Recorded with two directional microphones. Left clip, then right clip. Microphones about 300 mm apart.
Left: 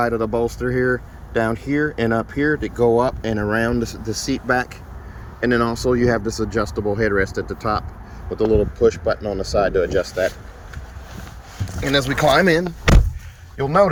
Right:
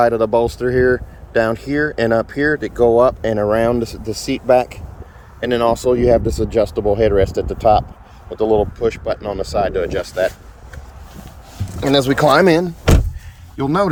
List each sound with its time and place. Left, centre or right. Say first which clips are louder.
0.0 s speech: right 6 dB; centre
8.3 s speech: right 3 dB; right
8.8 s speech: left 2 dB; centre
11.9 s speech: right 4 dB; right